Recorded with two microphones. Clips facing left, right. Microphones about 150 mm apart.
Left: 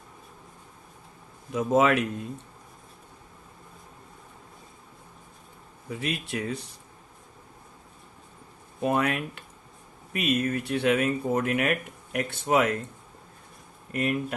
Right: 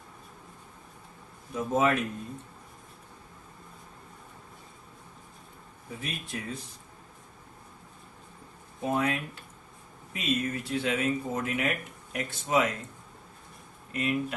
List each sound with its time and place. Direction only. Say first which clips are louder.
1.5 s speech: left 4 dB; 90° left
6.0 s speech: left 7 dB; 75° left (ahead or behind)
8.8 s speech: left 3 dB; 65° left (ahead or behind)
13.9 s speech: left 2 dB; 55° left (ahead or behind)